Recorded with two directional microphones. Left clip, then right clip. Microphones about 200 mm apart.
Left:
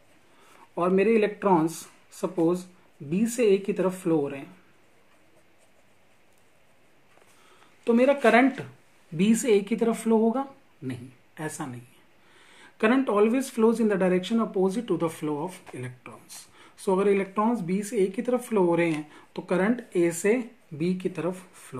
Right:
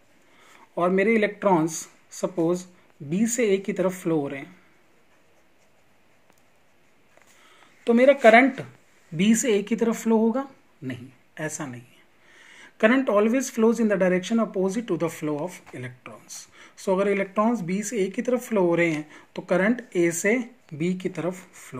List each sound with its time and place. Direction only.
0.7 s speech: 25° right (ahead or behind)
7.8 s a woman's voice: 25° right (ahead or behind)